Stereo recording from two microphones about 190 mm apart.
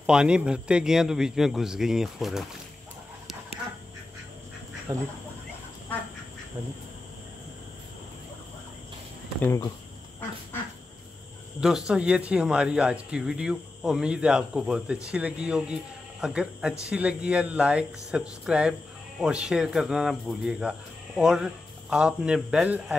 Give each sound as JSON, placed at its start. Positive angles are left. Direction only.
{"t": 0.0, "sound": "speech", "side_deg": -5}
{"t": 4.9, "sound": "speech", "side_deg": -20}
{"t": 9.4, "sound": "speech", "side_deg": 15}
{"t": 11.9, "sound": "speech", "side_deg": -5}